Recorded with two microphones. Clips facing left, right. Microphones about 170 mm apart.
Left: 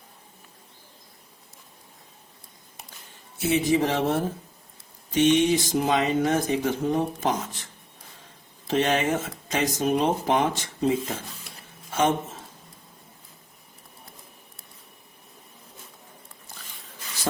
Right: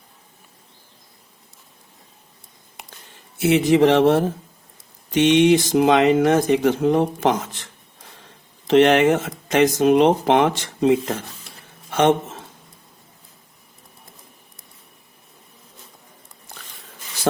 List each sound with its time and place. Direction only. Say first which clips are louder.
3.3 s speech: right 6 dB; 75° right (ahead or behind)